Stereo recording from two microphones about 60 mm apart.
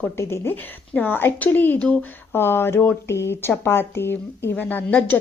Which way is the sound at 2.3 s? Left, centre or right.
Left.